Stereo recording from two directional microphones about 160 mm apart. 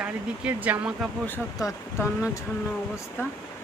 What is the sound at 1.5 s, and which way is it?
Speech, 20° left (ahead or behind).